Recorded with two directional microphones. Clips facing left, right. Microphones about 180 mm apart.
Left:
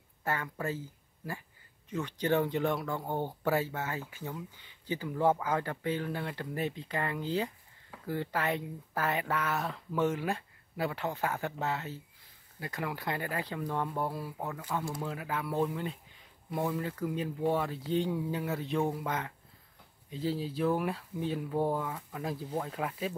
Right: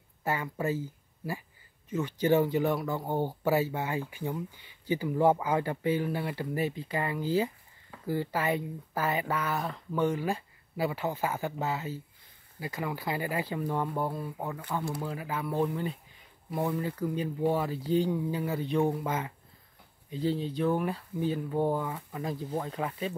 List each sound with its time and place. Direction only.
0.2 s speech: 10° right (ahead or behind)